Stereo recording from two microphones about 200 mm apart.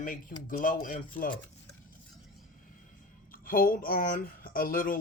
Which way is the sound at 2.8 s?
45° left (ahead or behind).